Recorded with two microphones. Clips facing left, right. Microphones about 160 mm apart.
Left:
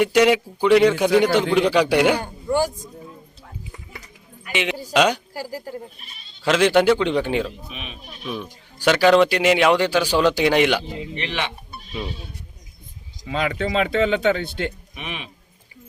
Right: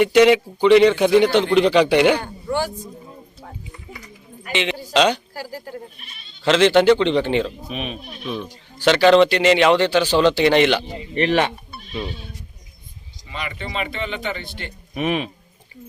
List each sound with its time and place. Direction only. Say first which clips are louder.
0.0 s a man's voice: right 3 dB; 5° left (ahead or behind)
2.6 s speech: left 3 dB; 45° left (ahead or behind)
4.5 s a man's voice: right 1 dB; 10° left (ahead or behind)
7.7 s speech: right 9 dB; 45° right (ahead or behind)
8.8 s a man's voice: right 2 dB; 10° left (ahead or behind)
11.1 s speech: right 11 dB; 45° right (ahead or behind)
13.2 s speech: left 8 dB; 90° left
14.9 s speech: right 12 dB; 45° right (ahead or behind)